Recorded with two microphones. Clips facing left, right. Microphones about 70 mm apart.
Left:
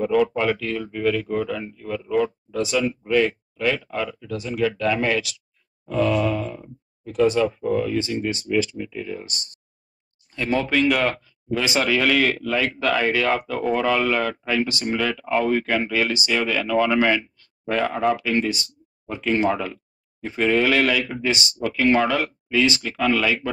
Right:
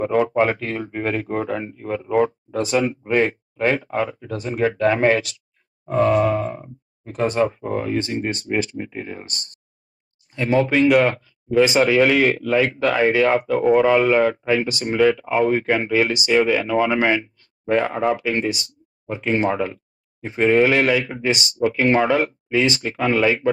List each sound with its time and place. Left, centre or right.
0.0 s speech: right
10.3 s speech: centre